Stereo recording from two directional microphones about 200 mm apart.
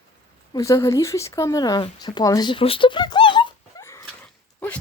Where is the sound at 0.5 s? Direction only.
15° left (ahead or behind).